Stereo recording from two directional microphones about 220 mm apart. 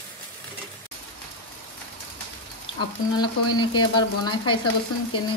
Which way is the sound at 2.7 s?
20° left (ahead or behind).